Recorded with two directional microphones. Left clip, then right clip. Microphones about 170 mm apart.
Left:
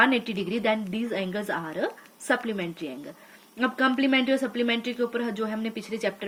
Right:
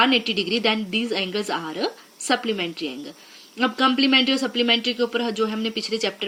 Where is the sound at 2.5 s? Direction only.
15° right (ahead or behind).